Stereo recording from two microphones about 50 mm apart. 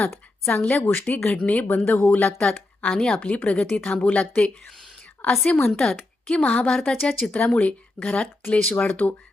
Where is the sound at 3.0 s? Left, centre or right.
Left.